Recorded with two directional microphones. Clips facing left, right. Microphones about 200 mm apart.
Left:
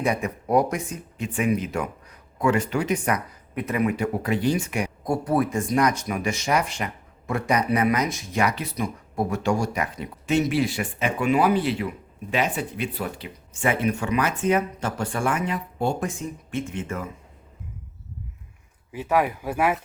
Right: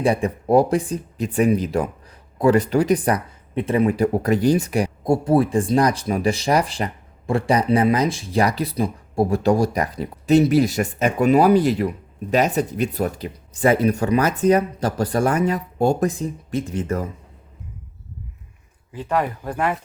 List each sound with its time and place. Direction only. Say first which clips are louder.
0.0 s speech: right 5 dB; 30° right (ahead or behind)
18.9 s speech: even; 10° left (ahead or behind)